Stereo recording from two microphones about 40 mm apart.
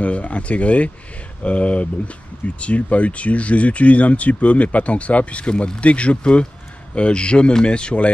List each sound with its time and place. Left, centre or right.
0.0 s speech: left